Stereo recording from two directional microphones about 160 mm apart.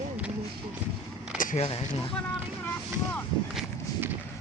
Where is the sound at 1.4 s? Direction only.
55° left (ahead or behind).